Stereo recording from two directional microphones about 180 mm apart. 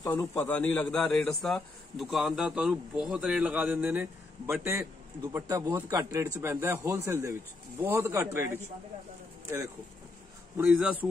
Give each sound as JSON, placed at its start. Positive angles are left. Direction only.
{"t": 0.0, "sound": "a man's voice", "side_deg": 15}
{"t": 10.6, "sound": "a man's voice", "side_deg": -5}